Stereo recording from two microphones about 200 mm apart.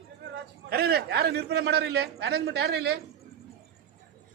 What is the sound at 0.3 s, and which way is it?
A man's voice, 50° right (ahead or behind).